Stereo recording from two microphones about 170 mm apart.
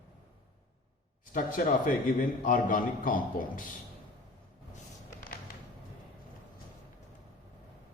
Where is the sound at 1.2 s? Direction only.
55° left (ahead or behind).